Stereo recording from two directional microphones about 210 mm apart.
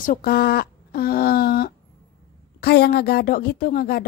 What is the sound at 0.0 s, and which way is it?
A woman's voice, 40° left (ahead or behind).